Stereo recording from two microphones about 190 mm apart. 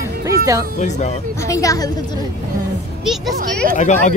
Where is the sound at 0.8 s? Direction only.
40° left (ahead or behind).